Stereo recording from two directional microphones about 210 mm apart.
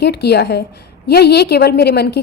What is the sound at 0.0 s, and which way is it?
A woman's voice, 50° left (ahead or behind).